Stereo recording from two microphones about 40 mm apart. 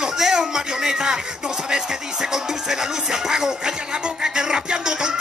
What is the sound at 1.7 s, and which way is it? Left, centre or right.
Music, centre.